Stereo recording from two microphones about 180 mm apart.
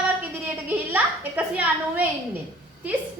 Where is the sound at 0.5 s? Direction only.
10° right (ahead or behind).